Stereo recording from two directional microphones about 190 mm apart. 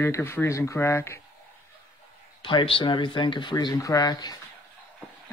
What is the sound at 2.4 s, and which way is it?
Speech, 25° left (ahead or behind).